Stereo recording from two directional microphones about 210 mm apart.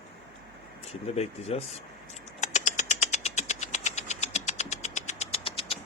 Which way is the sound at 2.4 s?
35° left (ahead or behind).